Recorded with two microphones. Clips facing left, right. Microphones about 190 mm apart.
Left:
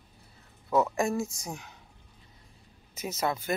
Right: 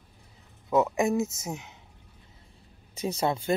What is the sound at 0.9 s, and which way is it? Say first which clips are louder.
Speech: right 3 dB; 20° right (ahead or behind).